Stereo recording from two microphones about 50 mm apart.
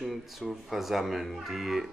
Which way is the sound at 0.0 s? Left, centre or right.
Centre.